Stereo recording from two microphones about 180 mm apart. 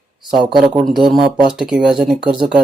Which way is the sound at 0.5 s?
5° right (ahead or behind).